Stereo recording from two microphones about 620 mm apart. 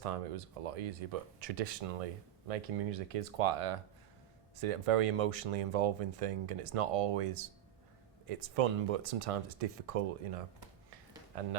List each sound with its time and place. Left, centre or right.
0.0 s speech: right
11.3 s speech: right